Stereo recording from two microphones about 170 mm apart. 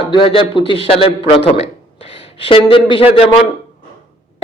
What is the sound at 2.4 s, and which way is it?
Speech, 30° left (ahead or behind).